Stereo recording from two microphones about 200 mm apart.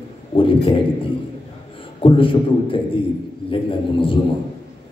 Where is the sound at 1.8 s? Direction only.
25° left (ahead or behind).